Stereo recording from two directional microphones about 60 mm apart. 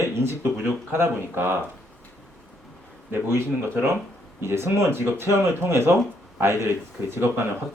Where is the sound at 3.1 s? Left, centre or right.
Right.